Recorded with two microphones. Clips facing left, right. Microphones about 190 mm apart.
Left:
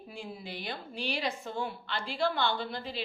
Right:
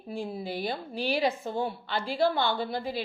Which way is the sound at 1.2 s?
55° right (ahead or behind).